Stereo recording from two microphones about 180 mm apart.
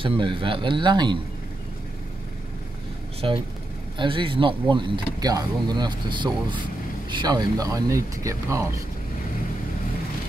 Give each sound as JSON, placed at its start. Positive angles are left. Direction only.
{"t": 0.0, "sound": "speech", "side_deg": -30}
{"t": 4.0, "sound": "speech", "side_deg": -30}